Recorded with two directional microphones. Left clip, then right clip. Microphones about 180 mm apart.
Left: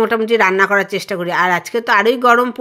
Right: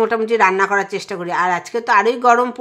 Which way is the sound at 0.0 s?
20° left (ahead or behind).